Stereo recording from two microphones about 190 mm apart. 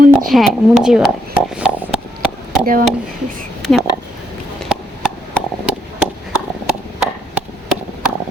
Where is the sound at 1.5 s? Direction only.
5° right (ahead or behind).